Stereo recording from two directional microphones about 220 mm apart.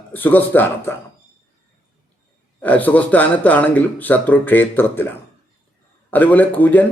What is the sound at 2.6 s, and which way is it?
A man's voice, 5° left (ahead or behind).